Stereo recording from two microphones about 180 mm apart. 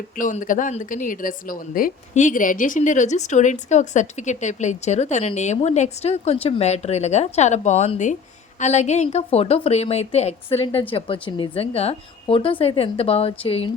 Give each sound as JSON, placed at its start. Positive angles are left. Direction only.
{"t": 0.2, "sound": "a woman's voice", "side_deg": 45}